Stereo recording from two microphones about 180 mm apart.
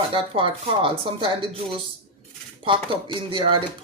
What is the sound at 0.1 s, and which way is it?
Speech, 30° right (ahead or behind).